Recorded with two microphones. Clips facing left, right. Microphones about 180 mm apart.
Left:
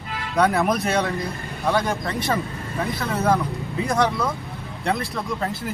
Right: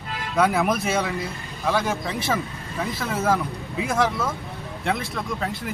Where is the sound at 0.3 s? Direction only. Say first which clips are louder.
Left 1 dB; centre (ahead or behind).